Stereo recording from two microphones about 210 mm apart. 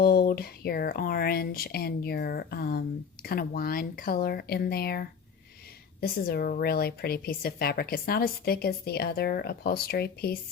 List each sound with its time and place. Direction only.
0.0 s a woman's voice: 45° left (ahead or behind)